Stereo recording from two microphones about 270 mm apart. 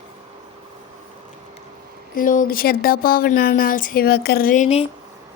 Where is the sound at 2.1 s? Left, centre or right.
Left.